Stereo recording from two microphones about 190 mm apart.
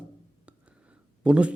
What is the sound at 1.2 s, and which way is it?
Speech, 5° right (ahead or behind).